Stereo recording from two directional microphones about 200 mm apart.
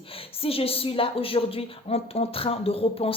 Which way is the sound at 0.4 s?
30° left (ahead or behind).